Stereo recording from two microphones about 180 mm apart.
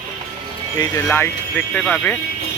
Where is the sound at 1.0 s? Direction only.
10° left (ahead or behind).